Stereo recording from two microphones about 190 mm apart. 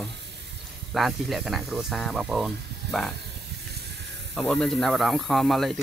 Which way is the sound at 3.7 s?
60° right (ahead or behind).